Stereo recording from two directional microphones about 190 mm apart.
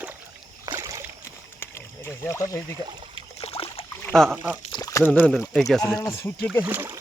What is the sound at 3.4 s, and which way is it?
Rowboat, 30° left (ahead or behind).